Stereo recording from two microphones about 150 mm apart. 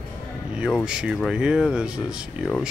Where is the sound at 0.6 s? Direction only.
5° right (ahead or behind).